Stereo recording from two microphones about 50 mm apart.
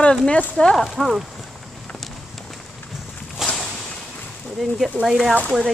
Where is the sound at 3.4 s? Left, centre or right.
Centre.